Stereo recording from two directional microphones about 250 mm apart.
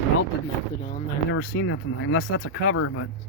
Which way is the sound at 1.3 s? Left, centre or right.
Left.